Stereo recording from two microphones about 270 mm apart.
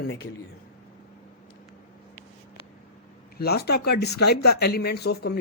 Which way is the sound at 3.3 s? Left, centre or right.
Left.